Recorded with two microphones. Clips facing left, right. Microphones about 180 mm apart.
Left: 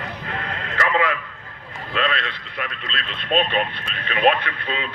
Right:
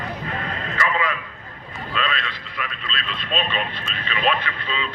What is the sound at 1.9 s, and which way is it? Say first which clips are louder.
Speech: left 3 dB; 55° left (ahead or behind).